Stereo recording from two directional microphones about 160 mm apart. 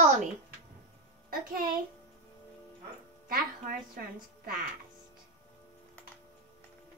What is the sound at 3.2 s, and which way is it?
A woman's voice, 65° right (ahead or behind).